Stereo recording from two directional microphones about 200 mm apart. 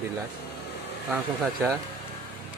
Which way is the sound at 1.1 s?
10° right (ahead or behind).